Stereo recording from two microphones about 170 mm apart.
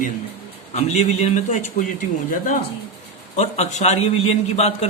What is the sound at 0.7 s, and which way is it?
A man's voice, 40° left (ahead or behind).